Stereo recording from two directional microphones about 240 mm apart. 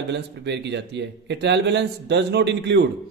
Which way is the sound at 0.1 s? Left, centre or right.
Right.